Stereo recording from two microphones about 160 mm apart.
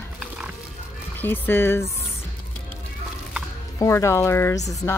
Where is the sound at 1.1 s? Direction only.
15° left (ahead or behind).